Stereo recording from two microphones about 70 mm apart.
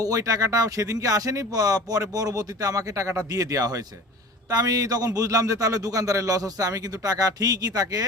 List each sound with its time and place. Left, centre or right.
0.0 s a man's voice: right
3.2 s a man's voice: right